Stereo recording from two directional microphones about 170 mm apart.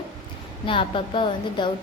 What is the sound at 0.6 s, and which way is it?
A woman's voice, 30° left (ahead or behind).